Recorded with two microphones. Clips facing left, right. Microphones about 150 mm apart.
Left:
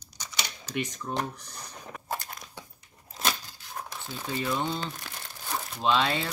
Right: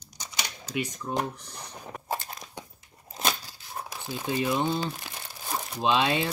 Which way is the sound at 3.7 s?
10° right (ahead or behind).